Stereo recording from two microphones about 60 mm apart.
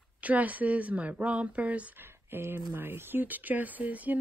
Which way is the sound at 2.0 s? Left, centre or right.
Right.